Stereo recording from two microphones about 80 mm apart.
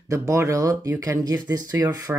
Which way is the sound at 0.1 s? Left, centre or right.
Right.